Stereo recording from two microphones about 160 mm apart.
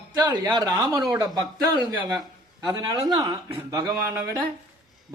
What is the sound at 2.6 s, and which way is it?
Speech, 25° right (ahead or behind).